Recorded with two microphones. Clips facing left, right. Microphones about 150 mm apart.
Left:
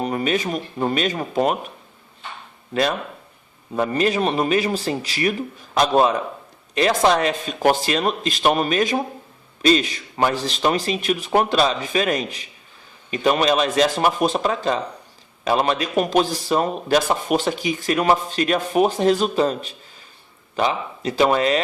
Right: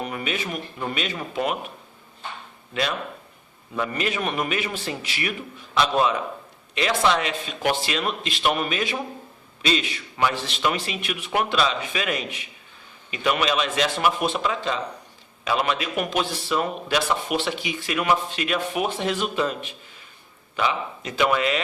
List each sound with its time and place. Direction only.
0.0 s a man's voice: 35° left (ahead or behind)
3.8 s a man's voice: 40° left (ahead or behind)